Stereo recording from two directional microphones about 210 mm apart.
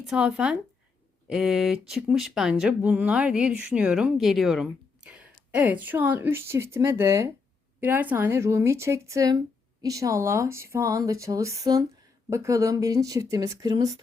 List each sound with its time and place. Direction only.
0.0 s speech: centre (ahead or behind)